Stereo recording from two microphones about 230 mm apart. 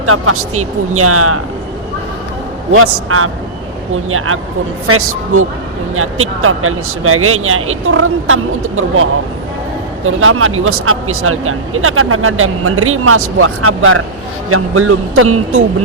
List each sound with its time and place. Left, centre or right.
0.0 s speech: right
2.7 s speech: right